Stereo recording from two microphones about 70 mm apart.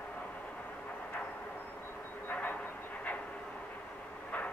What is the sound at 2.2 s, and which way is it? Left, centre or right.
Vehicle, left.